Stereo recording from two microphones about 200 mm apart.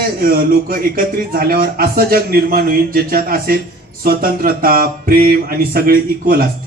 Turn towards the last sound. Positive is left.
turn(degrees=-50)  # may be behind; listen again after turning